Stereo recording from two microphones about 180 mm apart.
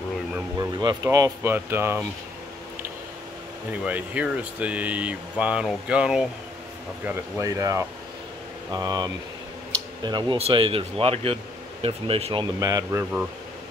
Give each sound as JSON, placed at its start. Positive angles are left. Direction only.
{"t": 0.6, "sound": "speech", "side_deg": -20}
{"t": 3.8, "sound": "speech", "side_deg": -5}
{"t": 7.1, "sound": "speech", "side_deg": -15}
{"t": 12.5, "sound": "speech", "side_deg": -20}